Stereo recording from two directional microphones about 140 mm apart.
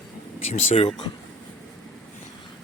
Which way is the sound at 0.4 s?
50° left (ahead or behind).